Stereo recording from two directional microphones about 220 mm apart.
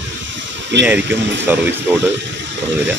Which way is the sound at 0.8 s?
5° right (ahead or behind).